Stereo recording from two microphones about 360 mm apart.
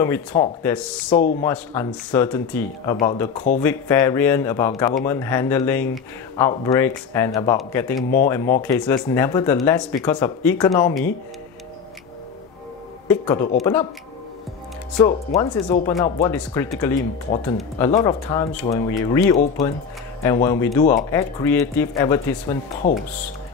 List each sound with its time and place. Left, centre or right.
0.0 s speech: centre
13.1 s speech: centre
15.0 s speech: centre